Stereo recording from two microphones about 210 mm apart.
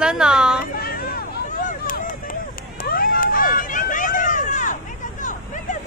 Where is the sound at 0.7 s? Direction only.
45° left (ahead or behind).